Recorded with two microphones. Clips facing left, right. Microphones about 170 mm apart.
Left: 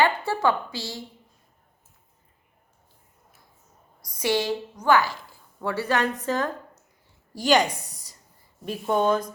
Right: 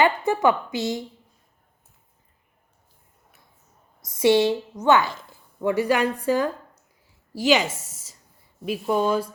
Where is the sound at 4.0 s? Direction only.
25° right (ahead or behind).